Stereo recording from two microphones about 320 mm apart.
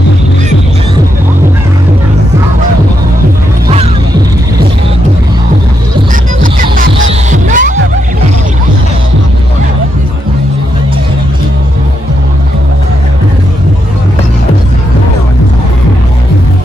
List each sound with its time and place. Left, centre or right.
6.4 s music: right